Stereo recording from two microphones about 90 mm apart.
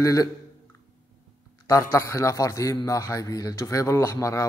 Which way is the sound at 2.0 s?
35° left (ahead or behind).